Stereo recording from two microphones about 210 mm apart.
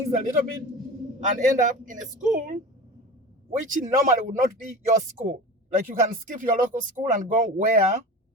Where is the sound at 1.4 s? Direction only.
40° right (ahead or behind).